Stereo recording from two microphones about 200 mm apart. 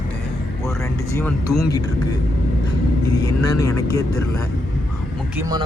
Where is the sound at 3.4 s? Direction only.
15° left (ahead or behind).